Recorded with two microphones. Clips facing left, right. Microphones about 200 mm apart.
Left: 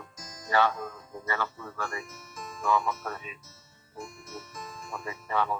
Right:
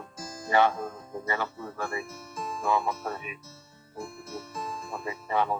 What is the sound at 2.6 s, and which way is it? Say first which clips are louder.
Speech: even; 20° right (ahead or behind).